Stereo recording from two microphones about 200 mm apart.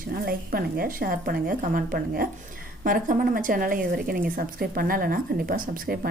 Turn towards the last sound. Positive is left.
turn(degrees=-45)  # may be behind; listen again after turning